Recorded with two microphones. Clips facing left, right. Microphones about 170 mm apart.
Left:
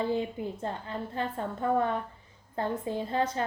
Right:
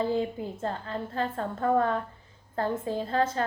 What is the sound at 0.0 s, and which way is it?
A woman's voice, 20° left (ahead or behind).